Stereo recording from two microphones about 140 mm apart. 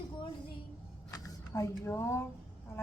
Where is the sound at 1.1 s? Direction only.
25° left (ahead or behind).